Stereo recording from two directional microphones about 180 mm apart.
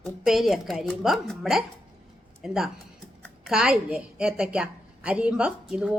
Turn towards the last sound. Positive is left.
turn(degrees=-5)  # may be behind; listen again after turning